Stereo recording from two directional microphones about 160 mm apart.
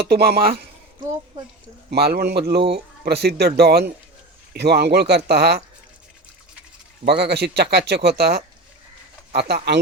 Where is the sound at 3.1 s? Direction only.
90° right.